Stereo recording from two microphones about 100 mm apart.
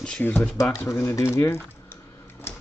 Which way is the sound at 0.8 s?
25° left (ahead or behind).